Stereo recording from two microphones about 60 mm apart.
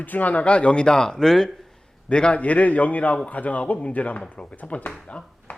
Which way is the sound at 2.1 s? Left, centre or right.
Centre.